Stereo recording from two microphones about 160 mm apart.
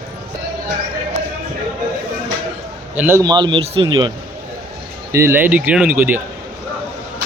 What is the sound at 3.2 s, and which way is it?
Speech, 30° right (ahead or behind).